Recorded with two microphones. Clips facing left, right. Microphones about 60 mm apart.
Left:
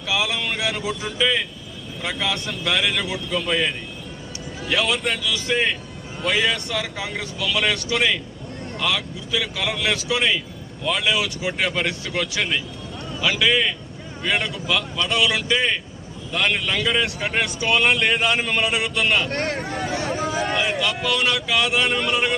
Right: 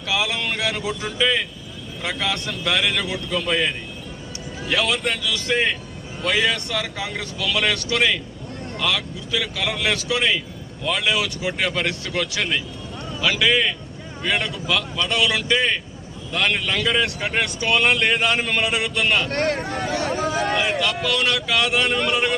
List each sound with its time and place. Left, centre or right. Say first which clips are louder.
0.1 s a man's voice: even; centre
19.3 s speech: right 3 dB; right
19.6 s speech: right 1 dB; centre